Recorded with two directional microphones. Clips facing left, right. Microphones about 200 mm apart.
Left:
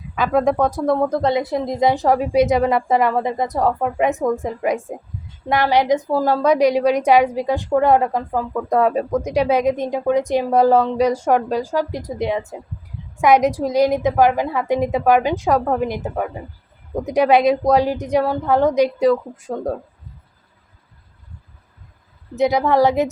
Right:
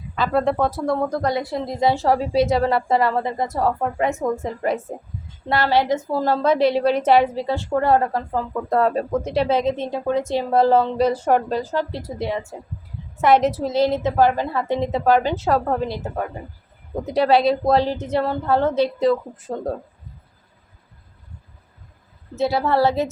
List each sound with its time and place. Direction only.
0.2 s speech: 15° left (ahead or behind)
22.4 s speech: 15° left (ahead or behind)